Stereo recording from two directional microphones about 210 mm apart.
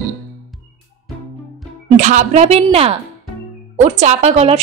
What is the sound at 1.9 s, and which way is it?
A woman's voice, 35° right (ahead or behind).